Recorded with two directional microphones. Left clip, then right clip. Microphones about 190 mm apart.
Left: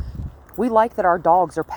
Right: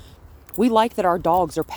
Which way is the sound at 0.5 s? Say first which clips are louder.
Left 1 dB; 35° right (ahead or behind).